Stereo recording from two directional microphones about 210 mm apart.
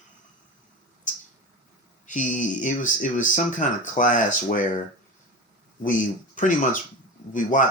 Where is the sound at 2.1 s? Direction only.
35° left (ahead or behind).